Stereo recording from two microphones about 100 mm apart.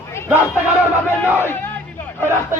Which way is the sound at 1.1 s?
20° left (ahead or behind).